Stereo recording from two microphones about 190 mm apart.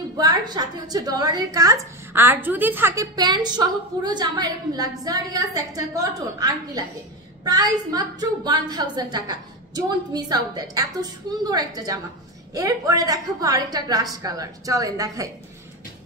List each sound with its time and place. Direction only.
0.2 s a woman's voice: 20° right (ahead or behind)